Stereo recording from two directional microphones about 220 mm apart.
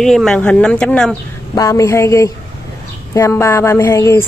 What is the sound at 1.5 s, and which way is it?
A woman's voice, 15° left (ahead or behind).